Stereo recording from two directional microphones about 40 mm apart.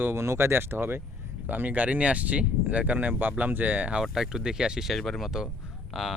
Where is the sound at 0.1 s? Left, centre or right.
Right.